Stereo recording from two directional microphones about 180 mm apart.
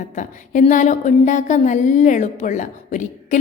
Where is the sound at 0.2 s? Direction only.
45° left (ahead or behind).